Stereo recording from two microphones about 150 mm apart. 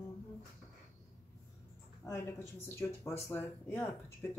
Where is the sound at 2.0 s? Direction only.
20° left (ahead or behind).